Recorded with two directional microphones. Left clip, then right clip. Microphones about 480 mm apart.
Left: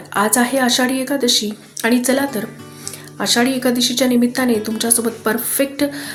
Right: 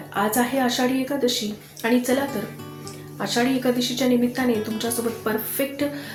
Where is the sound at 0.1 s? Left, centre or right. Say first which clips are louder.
Left 6 dB; centre.